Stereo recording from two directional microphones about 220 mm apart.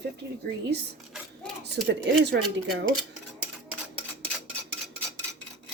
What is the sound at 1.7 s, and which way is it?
Speech, 50° right (ahead or behind).